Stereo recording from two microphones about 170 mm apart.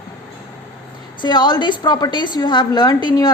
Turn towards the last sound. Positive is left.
turn(degrees=25)  # may be behind; listen again after turning